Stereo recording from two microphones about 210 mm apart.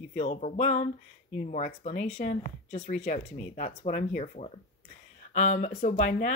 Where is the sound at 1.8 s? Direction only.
30° left (ahead or behind).